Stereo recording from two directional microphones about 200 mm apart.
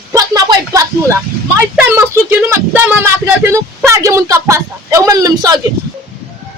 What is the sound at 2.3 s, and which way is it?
Speech, 10° right (ahead or behind).